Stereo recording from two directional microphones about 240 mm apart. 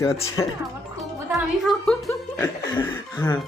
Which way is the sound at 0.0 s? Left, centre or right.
Centre.